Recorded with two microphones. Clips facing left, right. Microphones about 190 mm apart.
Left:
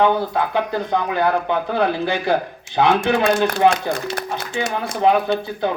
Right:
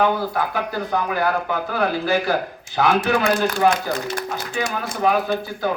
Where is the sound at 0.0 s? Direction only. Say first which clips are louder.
Left 2 dB; 25° left (ahead or behind).